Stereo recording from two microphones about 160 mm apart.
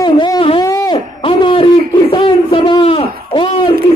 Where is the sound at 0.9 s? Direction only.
35° left (ahead or behind).